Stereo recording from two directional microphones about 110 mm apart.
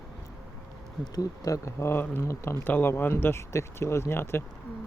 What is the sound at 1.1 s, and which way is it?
Speech, 35° left (ahead or behind).